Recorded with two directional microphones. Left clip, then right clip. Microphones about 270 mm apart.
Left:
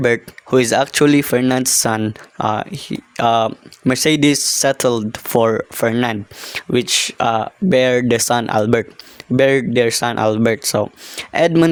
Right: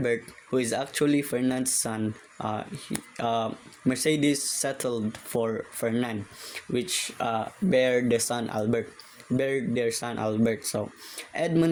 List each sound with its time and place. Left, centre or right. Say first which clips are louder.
0.0 s speech: left 11 dB; left